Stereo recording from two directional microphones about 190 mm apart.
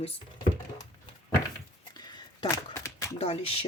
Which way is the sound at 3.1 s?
35° left (ahead or behind).